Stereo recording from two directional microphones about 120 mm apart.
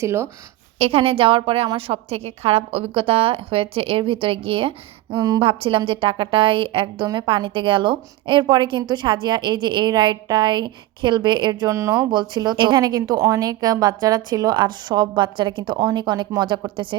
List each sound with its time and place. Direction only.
0.0 s speech: 20° right (ahead or behind)
0.8 s a woman's voice: 50° right (ahead or behind)
11.7 s speech: 25° right (ahead or behind)
12.1 s a woman's voice: 40° right (ahead or behind)